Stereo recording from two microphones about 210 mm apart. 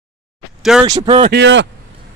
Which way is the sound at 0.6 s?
Centre (ahead or behind).